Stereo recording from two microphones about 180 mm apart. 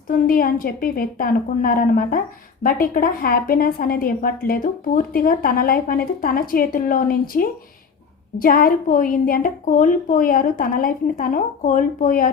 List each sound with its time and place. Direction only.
0.1 s a woman's voice: 50° left (ahead or behind)